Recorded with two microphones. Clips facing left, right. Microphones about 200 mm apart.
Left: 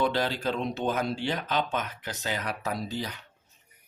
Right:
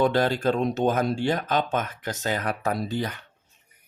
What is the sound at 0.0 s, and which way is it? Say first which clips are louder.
Speech: right 6 dB; 50° right (ahead or behind).